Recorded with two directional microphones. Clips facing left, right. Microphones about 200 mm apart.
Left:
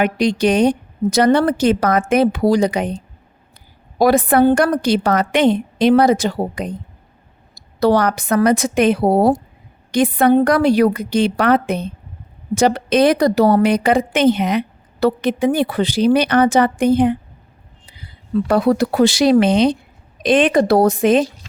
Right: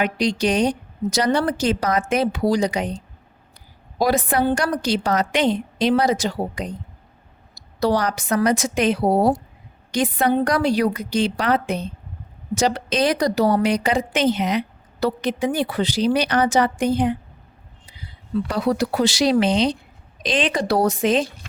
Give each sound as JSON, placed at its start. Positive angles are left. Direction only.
{"t": 0.0, "sound": "a woman's voice", "side_deg": 60}
{"t": 18.4, "sound": "a woman's voice", "side_deg": 55}